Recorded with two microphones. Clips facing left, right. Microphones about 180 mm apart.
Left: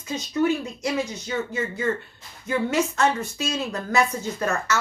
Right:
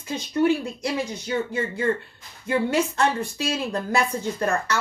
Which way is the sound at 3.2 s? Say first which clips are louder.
Right 1 dB; 30° right (ahead or behind).